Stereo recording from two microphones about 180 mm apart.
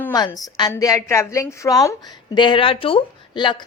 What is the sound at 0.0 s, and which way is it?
A woman's voice, 15° left (ahead or behind).